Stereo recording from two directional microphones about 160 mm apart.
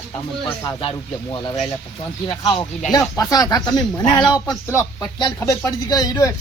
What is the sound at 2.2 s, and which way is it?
Speech, 30° left (ahead or behind).